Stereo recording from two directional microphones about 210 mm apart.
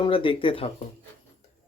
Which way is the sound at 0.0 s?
25° left (ahead or behind).